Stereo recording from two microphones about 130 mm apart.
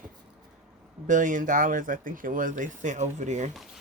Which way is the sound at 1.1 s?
80° right.